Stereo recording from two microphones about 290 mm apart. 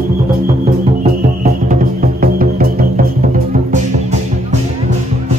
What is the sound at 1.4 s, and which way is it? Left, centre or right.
Music, right.